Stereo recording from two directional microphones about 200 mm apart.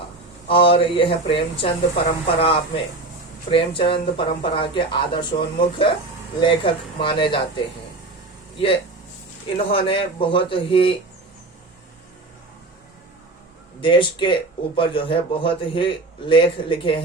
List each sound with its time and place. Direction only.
0.4 s speech: 25° left (ahead or behind)
8.5 s speech: 25° left (ahead or behind)
13.8 s speech: 25° left (ahead or behind)